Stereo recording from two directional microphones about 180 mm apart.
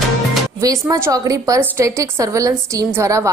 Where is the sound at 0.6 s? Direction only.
20° right (ahead or behind).